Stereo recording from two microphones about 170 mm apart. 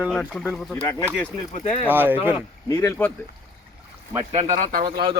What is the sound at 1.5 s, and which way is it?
Speech, 35° left (ahead or behind).